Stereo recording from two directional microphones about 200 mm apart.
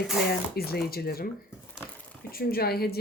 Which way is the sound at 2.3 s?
50° left (ahead or behind).